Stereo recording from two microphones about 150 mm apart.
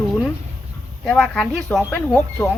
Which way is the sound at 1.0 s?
5° left (ahead or behind).